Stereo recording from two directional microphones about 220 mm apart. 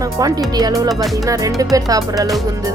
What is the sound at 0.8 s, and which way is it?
Speech, centre (ahead or behind).